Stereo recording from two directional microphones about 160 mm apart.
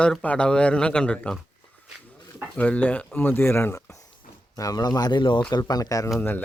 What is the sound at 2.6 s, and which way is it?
Speech, 10° left (ahead or behind).